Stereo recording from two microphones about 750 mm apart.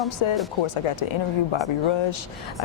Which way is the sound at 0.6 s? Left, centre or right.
Left.